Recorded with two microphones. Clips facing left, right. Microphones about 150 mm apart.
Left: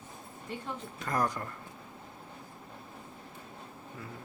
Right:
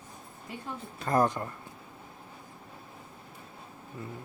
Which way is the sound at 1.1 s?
25° right (ahead or behind).